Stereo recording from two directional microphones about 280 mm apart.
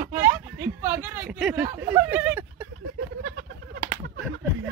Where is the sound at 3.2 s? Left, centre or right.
Right.